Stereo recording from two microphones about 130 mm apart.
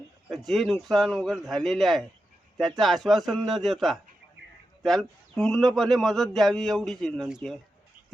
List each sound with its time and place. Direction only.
0.3 s a man's voice: centre (ahead or behind)